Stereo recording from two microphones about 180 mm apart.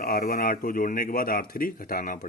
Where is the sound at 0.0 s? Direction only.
55° left (ahead or behind).